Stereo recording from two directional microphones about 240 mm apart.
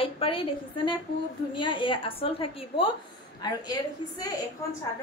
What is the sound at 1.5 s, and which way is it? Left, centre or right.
A woman's voice, centre.